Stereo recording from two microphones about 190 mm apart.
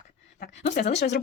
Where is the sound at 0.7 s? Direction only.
35° left (ahead or behind).